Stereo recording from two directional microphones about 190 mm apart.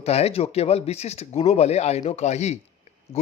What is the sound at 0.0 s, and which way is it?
Speech, 35° left (ahead or behind).